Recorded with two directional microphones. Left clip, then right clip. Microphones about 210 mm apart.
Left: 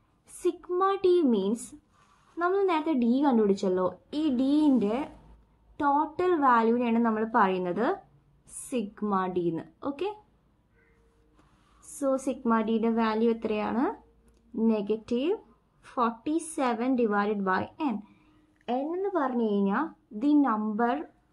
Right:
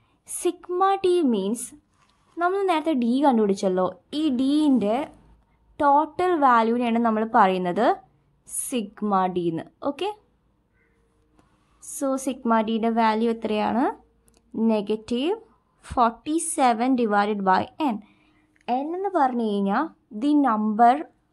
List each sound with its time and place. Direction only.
0.4 s a woman's voice: 40° right (ahead or behind)
12.0 s a woman's voice: 40° right (ahead or behind)